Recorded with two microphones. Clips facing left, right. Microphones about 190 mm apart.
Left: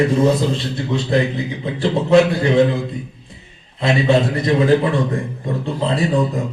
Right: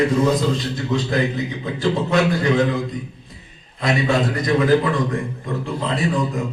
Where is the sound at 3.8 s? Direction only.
25° left (ahead or behind).